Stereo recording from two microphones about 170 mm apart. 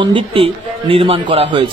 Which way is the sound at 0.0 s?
30° right (ahead or behind).